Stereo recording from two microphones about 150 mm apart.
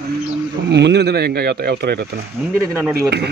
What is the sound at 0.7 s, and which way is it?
Speech, 90° right.